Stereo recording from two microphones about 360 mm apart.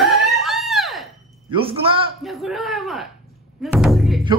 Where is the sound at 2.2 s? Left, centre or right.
Centre.